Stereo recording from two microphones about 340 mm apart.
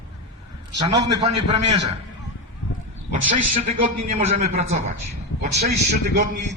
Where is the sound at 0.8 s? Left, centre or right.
Centre.